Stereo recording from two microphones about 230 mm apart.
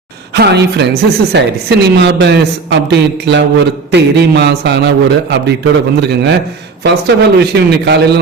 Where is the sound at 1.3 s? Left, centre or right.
Right.